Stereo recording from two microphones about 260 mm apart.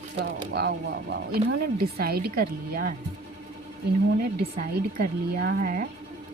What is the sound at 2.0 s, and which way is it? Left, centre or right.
Speech, right.